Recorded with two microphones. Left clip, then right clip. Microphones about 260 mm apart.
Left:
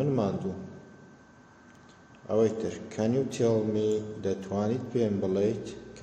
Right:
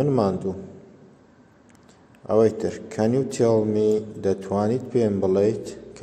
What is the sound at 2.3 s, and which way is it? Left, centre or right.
A man's voice, right.